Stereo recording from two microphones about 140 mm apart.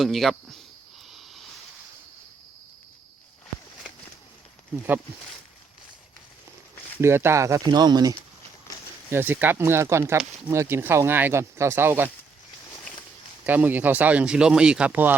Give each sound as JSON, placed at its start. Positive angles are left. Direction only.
{"t": 0.0, "sound": "speech", "side_deg": 0}
{"t": 1.1, "sound": "a sound", "side_deg": 0}
{"t": 7.0, "sound": "speech", "side_deg": -20}
{"t": 9.0, "sound": "speech", "side_deg": -15}
{"t": 13.4, "sound": "speech", "side_deg": -10}